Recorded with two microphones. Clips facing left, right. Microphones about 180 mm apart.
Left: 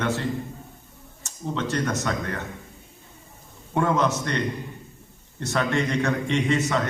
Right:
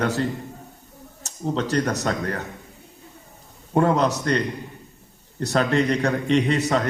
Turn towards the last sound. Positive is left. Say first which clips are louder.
# right 3 dB
turn(degrees=-35)  # may be behind; listen again after turning